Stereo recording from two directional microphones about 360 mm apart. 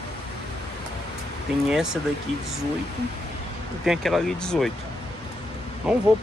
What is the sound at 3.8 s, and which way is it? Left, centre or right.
Speech, centre.